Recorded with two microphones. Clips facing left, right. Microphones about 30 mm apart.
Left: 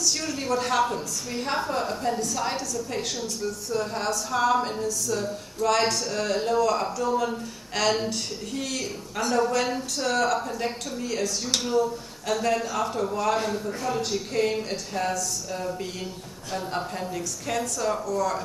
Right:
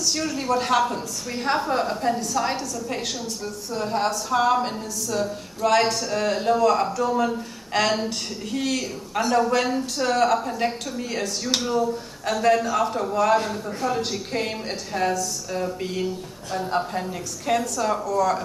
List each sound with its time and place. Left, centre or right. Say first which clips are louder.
0.0 s speech: right 2 dB; centre
0.6 s a woman's voice: right 2 dB; centre
11.4 s speech: right 2 dB; centre
12.3 s a woman's voice: right 5 dB; centre